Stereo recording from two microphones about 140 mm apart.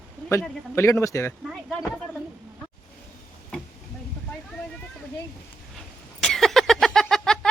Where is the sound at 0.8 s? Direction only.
20° left (ahead or behind).